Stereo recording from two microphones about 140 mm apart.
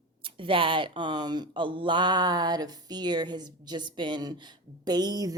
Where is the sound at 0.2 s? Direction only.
40° right (ahead or behind).